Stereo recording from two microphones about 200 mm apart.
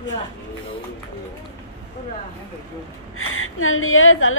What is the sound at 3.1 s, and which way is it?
Speech, 90° left.